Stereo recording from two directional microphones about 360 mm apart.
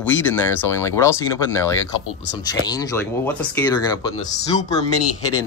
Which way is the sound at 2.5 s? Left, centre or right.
Centre.